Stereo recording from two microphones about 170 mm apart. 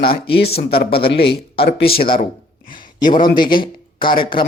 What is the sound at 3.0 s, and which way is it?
Speech, 25° left (ahead or behind).